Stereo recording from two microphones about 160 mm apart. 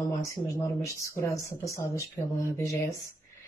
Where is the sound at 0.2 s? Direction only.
20° left (ahead or behind).